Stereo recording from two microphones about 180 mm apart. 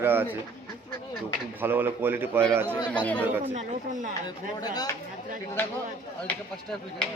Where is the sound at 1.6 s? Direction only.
10° right (ahead or behind).